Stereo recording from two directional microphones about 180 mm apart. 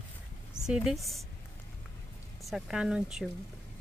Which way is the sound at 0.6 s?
5° right (ahead or behind).